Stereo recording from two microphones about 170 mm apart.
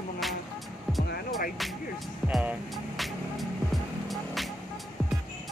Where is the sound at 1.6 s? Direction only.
Centre (ahead or behind).